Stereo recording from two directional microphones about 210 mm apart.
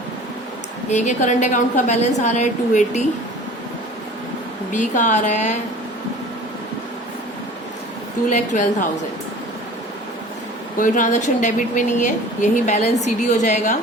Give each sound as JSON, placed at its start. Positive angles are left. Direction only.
{"t": 0.9, "sound": "speech", "side_deg": 35}
{"t": 4.7, "sound": "speech", "side_deg": 35}
{"t": 8.3, "sound": "speech", "side_deg": 35}
{"t": 10.8, "sound": "speech", "side_deg": 40}